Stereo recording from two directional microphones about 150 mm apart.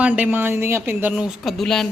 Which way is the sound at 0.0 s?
10° right (ahead or behind).